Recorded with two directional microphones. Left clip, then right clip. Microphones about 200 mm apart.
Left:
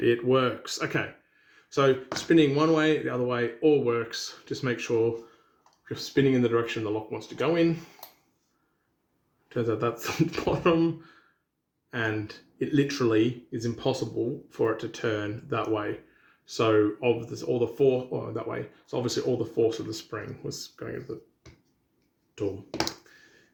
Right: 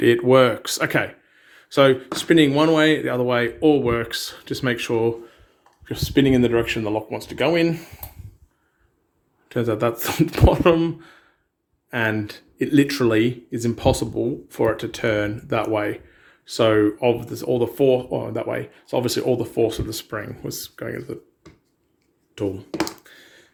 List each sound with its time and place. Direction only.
0.0 s speech: 50° right (ahead or behind)
9.5 s speech: 50° right (ahead or behind)
22.4 s speech: 45° right (ahead or behind)